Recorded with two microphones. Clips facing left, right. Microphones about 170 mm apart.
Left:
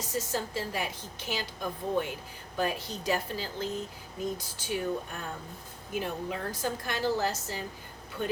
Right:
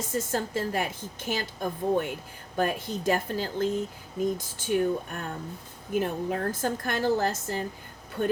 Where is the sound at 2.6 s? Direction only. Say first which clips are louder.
Right 4 dB; 50° right (ahead or behind).